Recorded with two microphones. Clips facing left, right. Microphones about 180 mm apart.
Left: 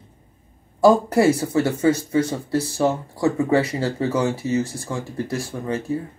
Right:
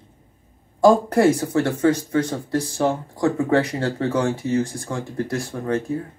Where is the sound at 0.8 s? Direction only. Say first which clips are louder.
Even; 5° left (ahead or behind).